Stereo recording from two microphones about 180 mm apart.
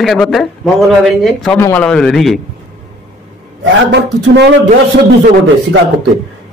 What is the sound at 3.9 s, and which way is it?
Speech, 70° right (ahead or behind).